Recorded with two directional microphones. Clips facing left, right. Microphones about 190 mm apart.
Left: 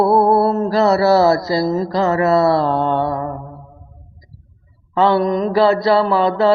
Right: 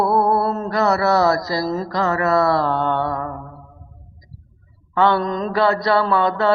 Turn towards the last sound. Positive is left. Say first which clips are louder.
# left 3 dB
turn(degrees=25)  # may be behind; listen again after turning